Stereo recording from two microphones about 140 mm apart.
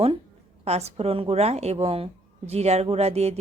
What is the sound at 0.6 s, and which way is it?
A woman's voice, 50° right (ahead or behind).